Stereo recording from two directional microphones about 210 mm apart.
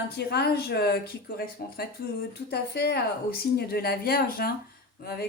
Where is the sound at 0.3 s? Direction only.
50° left (ahead or behind).